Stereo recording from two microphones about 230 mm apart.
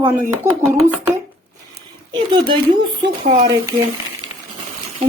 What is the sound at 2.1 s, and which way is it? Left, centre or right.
Speech, right.